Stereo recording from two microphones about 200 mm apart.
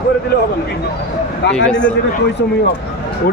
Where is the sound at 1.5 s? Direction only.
5° left (ahead or behind).